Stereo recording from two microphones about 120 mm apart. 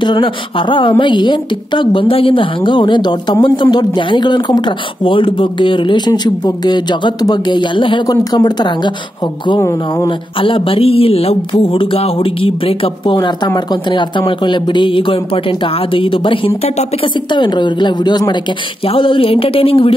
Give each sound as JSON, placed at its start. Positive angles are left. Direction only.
{"t": 0.0, "sound": "a woman's voice", "side_deg": 45}
{"t": 9.6, "sound": "speech", "side_deg": 25}
{"t": 10.4, "sound": "a woman's voice", "side_deg": 45}
{"t": 18.9, "sound": "a woman's voice", "side_deg": 45}